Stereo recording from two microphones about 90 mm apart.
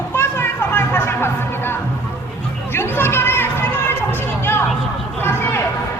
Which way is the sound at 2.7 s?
25° left (ahead or behind).